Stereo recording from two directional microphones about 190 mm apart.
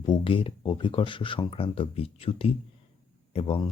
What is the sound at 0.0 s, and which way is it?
Speech, 25° left (ahead or behind).